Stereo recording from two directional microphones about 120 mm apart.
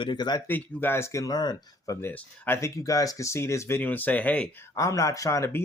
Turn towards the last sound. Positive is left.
turn(degrees=25)  # may be behind; listen again after turning